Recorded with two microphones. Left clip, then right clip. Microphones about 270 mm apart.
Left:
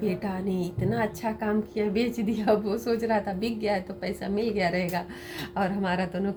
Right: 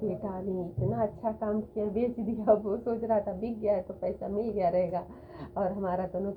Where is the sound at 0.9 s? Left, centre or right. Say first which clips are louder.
Left 1 dB; centre.